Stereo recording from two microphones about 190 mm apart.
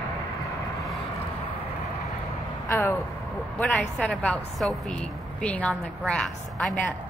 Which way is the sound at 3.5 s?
5° left (ahead or behind).